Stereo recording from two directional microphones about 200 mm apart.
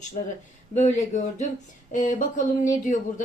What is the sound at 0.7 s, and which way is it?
Speech, 35° left (ahead or behind).